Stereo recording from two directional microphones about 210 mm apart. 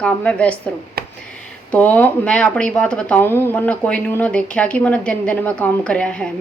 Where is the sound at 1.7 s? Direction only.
5° left (ahead or behind).